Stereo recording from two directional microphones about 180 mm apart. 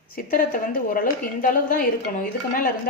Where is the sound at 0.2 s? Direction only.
50° left (ahead or behind).